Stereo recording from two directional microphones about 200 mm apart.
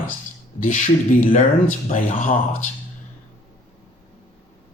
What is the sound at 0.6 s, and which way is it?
Speech, 40° left (ahead or behind).